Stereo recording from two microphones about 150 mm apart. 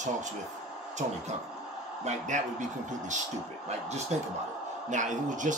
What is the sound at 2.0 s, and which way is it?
Speech, 50° right (ahead or behind).